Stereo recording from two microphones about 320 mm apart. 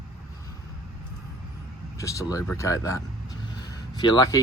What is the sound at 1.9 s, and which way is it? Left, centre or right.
Speech, centre.